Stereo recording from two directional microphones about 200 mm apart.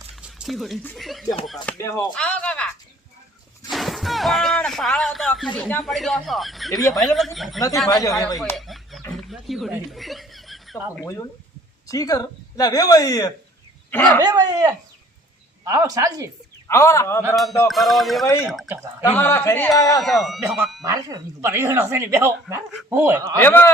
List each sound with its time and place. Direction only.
0.2 s speech: centre (ahead or behind)
1.6 s speech: 15° left (ahead or behind)
2.1 s a sound: 5° left (ahead or behind)
5.5 s speech: 5° left (ahead or behind)
7.9 s speech: 15° left (ahead or behind)
8.5 s a sound: centre (ahead or behind)
11.9 s speech: 15° left (ahead or behind)
14.2 s speech: 20° right (ahead or behind)
16.6 s speech: 15° left (ahead or behind)
17.3 s speech: centre (ahead or behind)
19.0 s speech: 10° left (ahead or behind)
20.0 s speech: centre (ahead or behind)
20.8 s speech: 15° right (ahead or behind)
23.4 s speech: 10° left (ahead or behind)